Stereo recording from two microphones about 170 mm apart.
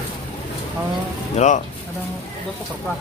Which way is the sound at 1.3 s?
45° left (ahead or behind).